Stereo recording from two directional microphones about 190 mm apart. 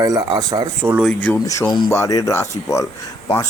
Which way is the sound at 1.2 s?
15° left (ahead or behind).